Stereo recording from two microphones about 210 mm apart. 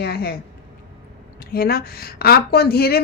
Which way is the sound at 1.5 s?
45° left (ahead or behind).